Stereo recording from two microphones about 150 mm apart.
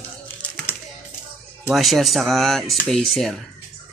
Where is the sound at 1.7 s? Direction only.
Centre (ahead or behind).